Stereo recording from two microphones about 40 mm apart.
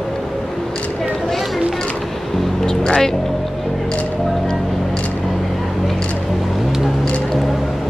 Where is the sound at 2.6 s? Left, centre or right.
Centre.